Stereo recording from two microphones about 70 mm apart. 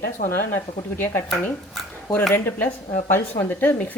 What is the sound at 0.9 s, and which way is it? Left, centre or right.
Speech, left.